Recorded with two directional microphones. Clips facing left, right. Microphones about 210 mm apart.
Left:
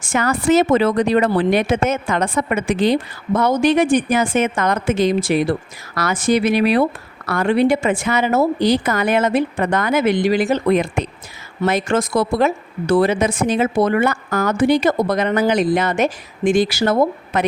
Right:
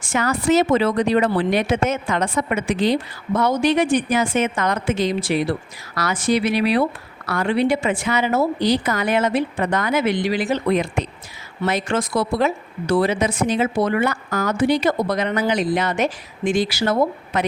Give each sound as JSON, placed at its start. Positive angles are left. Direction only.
{"t": 0.0, "sound": "a woman's voice", "side_deg": 50}